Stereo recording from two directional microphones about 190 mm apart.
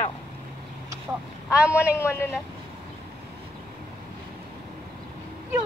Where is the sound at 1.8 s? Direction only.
15° left (ahead or behind).